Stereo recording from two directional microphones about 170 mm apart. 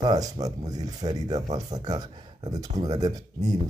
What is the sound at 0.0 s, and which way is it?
Speech, 20° right (ahead or behind).